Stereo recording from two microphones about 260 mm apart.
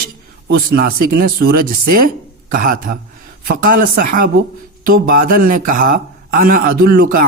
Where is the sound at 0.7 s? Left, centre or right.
Right.